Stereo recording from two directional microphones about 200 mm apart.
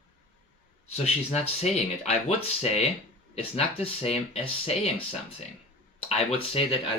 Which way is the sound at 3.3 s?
30° left (ahead or behind).